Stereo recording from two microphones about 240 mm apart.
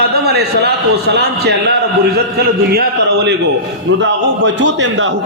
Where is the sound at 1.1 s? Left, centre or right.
Right.